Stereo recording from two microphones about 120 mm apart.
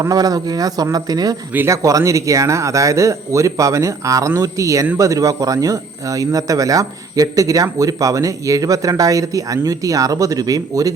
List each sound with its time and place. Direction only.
0.0 s speech: 30° right (ahead or behind)